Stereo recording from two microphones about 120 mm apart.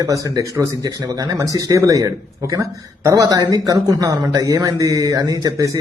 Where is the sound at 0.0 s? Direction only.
30° right (ahead or behind).